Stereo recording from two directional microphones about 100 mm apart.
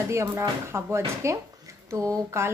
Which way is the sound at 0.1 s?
25° right (ahead or behind).